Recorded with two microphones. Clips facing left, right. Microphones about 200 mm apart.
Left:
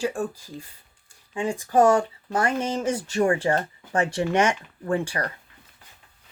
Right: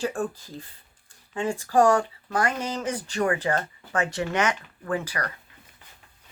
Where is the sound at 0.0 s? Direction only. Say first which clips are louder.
Left 1 dB; 10° left (ahead or behind); by 5.3 s 30° left (ahead or behind).